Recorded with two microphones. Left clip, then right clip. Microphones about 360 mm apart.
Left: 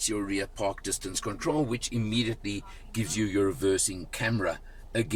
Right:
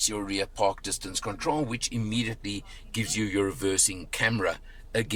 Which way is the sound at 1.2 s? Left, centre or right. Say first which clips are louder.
Right 1 dB; right.